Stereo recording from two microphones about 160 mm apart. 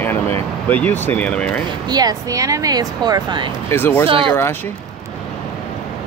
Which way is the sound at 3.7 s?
15° left (ahead or behind).